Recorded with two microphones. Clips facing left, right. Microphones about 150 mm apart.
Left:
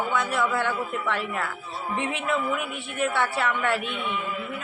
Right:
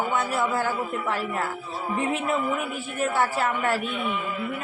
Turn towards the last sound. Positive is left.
turn(degrees=-5)  # may be behind; listen again after turning